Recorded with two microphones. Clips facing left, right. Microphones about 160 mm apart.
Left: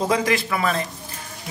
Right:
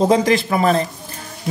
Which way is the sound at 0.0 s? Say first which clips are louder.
Right 6 dB; 25° right (ahead or behind).